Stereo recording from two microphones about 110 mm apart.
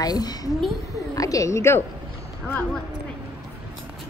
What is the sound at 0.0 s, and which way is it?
A woman's voice, 35° left (ahead or behind).